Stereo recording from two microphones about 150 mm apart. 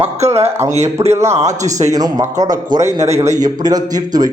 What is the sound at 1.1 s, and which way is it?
A man's voice, 20° right (ahead or behind).